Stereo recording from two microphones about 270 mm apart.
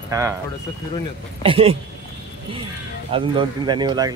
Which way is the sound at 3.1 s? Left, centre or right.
Centre.